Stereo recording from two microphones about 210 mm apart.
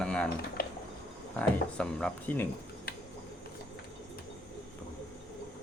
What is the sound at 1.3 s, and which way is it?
Speech, 5° left (ahead or behind).